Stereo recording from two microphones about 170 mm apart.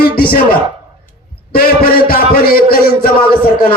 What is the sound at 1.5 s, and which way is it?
A man's voice, 60° left (ahead or behind).